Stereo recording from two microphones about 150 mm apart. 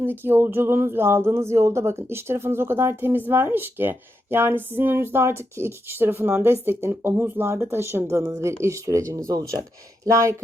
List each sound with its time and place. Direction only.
0.0 s speech: 15° right (ahead or behind)